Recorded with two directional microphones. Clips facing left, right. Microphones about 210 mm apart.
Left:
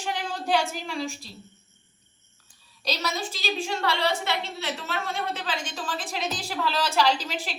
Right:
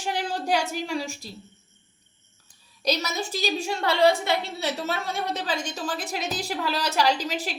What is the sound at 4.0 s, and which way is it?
A woman's voice, 45° right (ahead or behind).